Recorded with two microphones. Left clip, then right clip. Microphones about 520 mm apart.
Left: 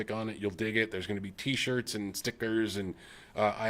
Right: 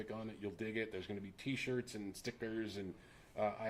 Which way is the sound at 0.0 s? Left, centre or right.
Left.